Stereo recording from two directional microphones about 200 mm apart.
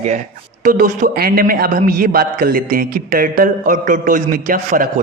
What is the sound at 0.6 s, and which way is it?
A man's voice, 45° right (ahead or behind).